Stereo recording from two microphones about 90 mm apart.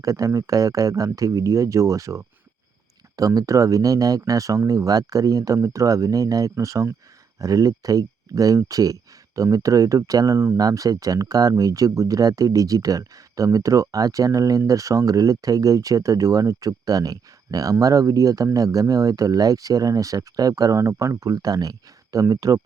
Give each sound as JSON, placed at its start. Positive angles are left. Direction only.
{"t": 0.0, "sound": "speech", "side_deg": -40}